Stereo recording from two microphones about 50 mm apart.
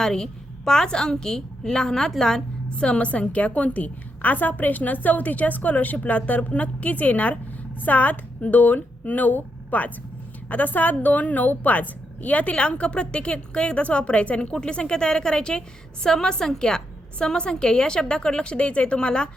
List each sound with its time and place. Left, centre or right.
0.0 s a woman's voice: centre